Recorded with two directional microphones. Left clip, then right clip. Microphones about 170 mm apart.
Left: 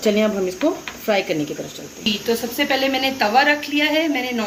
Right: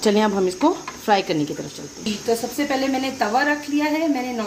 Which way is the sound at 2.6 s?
60° right (ahead or behind).